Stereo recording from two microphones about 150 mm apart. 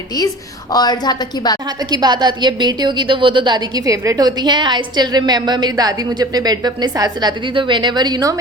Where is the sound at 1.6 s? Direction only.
25° right (ahead or behind).